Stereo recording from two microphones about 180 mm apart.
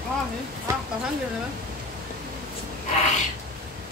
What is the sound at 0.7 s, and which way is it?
Speech, 15° right (ahead or behind).